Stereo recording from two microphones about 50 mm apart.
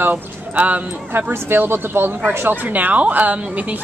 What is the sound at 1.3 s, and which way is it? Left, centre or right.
A woman's voice, right.